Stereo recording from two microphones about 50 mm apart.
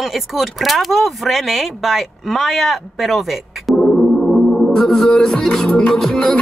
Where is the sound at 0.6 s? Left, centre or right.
Centre.